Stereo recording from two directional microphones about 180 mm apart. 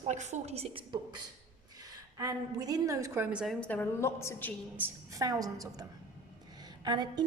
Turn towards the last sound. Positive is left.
turn(degrees=-25)  # may be behind; listen again after turning